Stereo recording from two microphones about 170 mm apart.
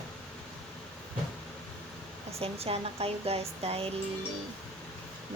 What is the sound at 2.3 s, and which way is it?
Speech, 35° right (ahead or behind).